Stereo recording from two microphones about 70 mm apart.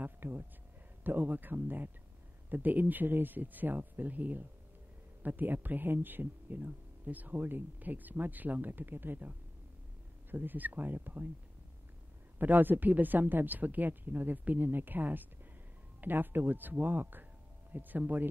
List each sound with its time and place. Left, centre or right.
0.0 s a sound: right
1.0 s speech: right
10.3 s speech: right
12.4 s speech: right